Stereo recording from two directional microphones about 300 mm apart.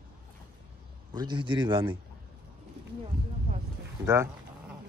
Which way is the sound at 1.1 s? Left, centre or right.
Centre.